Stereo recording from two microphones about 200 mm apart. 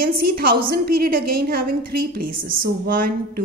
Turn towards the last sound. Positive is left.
turn(degrees=-45)  # may be behind; listen again after turning